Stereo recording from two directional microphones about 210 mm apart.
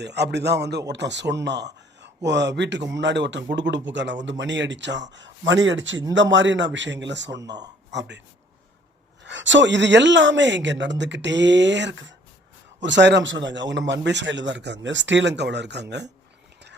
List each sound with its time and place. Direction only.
0.0 s a man's voice: 55° right (ahead or behind)
7.4 s speech: 20° right (ahead or behind)
7.9 s a man's voice: 55° right (ahead or behind)
9.2 s a man's voice: 60° right (ahead or behind)